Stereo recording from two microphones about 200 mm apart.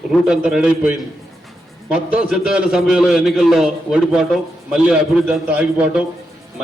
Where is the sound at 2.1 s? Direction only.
5° right (ahead or behind).